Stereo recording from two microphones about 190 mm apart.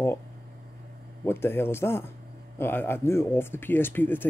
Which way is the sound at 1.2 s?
10° left (ahead or behind).